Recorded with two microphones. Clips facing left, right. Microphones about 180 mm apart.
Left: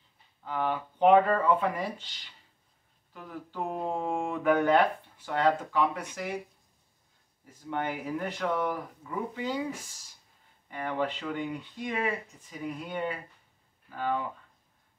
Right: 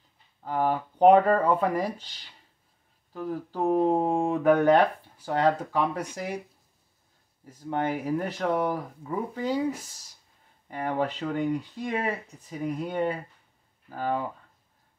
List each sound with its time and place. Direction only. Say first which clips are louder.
0.4 s speech: right 5 dB; 40° right (ahead or behind)
7.7 s speech: right 5 dB; 40° right (ahead or behind)
10.7 s speech: right 3 dB; 40° right (ahead or behind)